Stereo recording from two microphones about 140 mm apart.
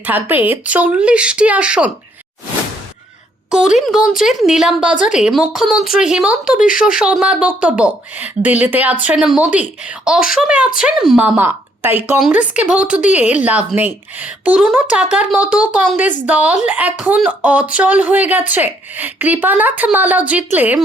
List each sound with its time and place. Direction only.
0.0 s speech: 10° right (ahead or behind)
3.8 s speech: centre (ahead or behind)
11.3 s speech: 15° right (ahead or behind)